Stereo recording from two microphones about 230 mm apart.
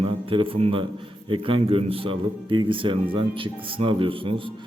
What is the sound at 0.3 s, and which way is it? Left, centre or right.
A man's voice, right.